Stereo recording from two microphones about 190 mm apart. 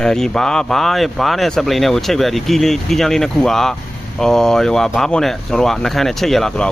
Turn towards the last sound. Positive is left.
turn(degrees=0)  # may be behind; listen again after turning